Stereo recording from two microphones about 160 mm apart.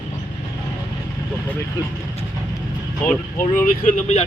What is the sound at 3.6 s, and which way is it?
Speech, 55° left (ahead or behind).